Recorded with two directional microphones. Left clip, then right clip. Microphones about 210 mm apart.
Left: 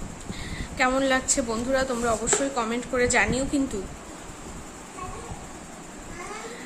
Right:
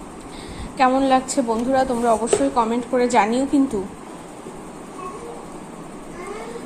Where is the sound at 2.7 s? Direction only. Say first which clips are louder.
Right 5 dB; 5° right (ahead or behind).